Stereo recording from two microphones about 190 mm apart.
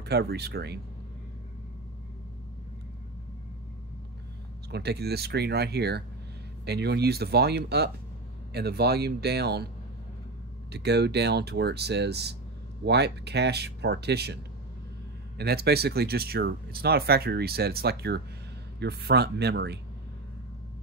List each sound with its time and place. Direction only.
0.0 s speech: 60° right (ahead or behind)
4.6 s speech: 60° right (ahead or behind)
10.7 s speech: 60° right (ahead or behind)